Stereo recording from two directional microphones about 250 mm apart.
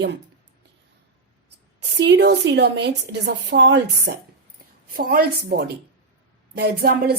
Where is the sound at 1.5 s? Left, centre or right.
Right.